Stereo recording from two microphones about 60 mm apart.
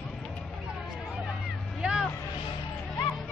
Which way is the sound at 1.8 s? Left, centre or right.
Centre.